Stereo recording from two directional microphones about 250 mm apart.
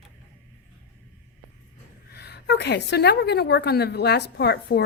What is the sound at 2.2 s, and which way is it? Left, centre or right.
A woman's voice, left.